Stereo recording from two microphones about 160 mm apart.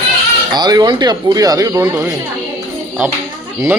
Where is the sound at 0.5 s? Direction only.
25° right (ahead or behind).